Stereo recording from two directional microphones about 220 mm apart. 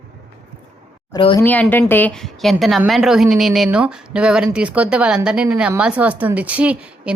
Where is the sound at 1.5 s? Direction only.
10° left (ahead or behind).